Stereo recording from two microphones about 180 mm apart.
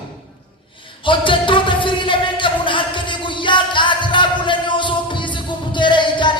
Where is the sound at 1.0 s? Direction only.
30° left (ahead or behind).